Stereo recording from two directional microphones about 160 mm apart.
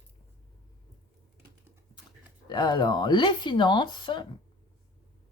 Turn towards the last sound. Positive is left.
turn(degrees=30)  # may be behind; listen again after turning